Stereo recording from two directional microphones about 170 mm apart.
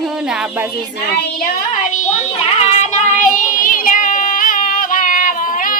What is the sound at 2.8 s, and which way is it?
Child singing, 45° left (ahead or behind).